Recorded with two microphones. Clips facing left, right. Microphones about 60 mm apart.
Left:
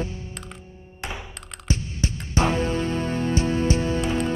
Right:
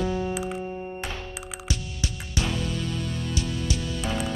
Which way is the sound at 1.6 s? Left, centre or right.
Left.